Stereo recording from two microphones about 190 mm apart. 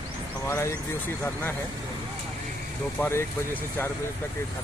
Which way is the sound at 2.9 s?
10° left (ahead or behind).